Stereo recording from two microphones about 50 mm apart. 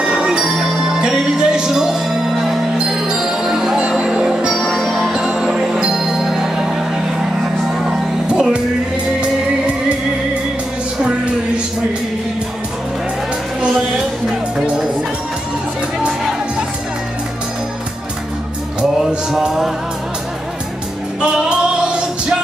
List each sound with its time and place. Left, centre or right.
0.0 s music: centre
3.8 s music: right
4.6 s music: centre
5.1 s music: centre
7.8 s music: centre
11.0 s music: right
18.8 s music: centre
21.5 s music: centre